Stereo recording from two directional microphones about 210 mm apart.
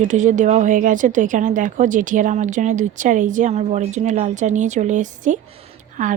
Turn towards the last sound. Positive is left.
turn(degrees=-35)  # may be behind; listen again after turning